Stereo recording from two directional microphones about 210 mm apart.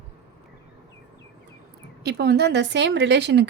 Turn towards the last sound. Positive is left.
turn(degrees=-55)  # may be behind; listen again after turning